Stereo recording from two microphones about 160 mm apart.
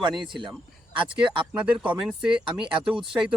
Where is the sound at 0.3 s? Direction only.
30° right (ahead or behind).